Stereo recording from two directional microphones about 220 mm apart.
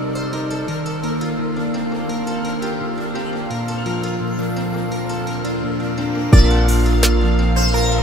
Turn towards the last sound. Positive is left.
turn(degrees=0)  # may be behind; listen again after turning